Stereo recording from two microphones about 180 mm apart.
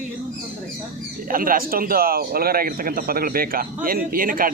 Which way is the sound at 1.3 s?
50° right (ahead or behind).